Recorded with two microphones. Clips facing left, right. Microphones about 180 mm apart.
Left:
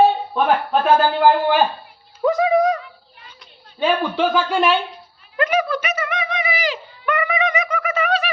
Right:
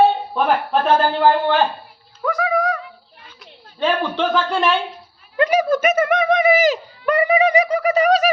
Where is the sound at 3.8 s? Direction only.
5° left (ahead or behind).